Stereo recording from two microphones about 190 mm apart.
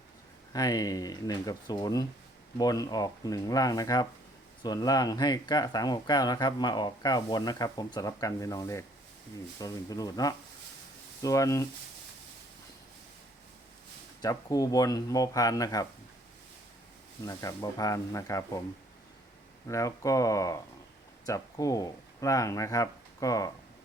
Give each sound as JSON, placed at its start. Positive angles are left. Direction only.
{"t": 0.5, "sound": "speech", "side_deg": 20}
{"t": 14.2, "sound": "speech", "side_deg": 20}
{"t": 17.2, "sound": "speech", "side_deg": 20}
{"t": 19.6, "sound": "speech", "side_deg": 15}